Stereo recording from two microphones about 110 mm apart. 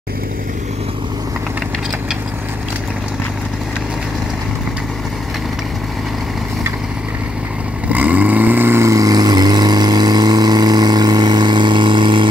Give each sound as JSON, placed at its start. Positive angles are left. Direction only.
{"t": 7.9, "sound": "vehicle", "side_deg": -15}